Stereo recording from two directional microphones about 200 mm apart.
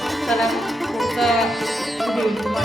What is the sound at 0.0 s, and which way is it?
Music, centre (ahead or behind).